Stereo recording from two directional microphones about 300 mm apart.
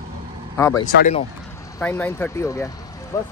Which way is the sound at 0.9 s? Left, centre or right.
Left.